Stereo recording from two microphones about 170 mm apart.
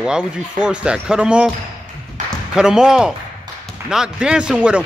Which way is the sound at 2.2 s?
45° right (ahead or behind).